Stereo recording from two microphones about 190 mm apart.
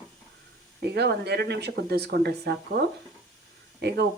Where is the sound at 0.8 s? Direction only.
60° right (ahead or behind).